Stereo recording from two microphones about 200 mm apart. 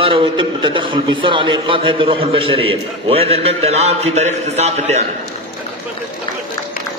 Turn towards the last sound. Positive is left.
turn(degrees=-35)  # may be behind; listen again after turning